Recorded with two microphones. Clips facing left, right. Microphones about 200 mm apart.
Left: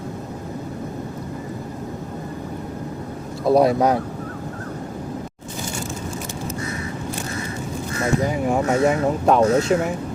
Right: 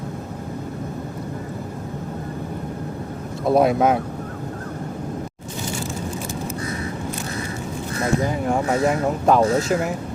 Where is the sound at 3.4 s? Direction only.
Centre (ahead or behind).